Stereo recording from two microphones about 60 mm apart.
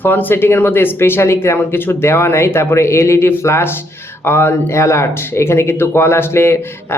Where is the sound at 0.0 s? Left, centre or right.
Left.